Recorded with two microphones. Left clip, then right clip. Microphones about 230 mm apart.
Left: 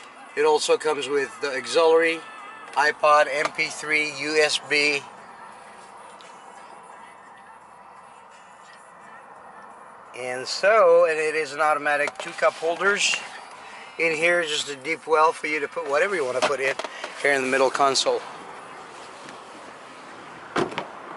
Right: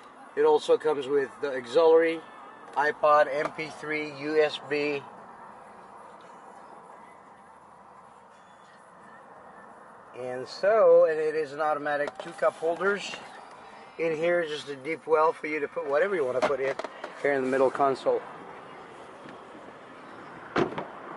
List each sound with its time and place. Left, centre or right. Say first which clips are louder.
0.3 s speech: left 2 dB; centre
10.1 s speech: left 6 dB; centre
20.5 s vehicle: left 2 dB; centre